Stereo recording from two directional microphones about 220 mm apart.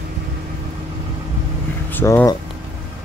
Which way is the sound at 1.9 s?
10° left (ahead or behind).